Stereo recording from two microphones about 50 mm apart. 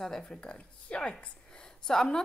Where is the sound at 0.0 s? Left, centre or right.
Centre.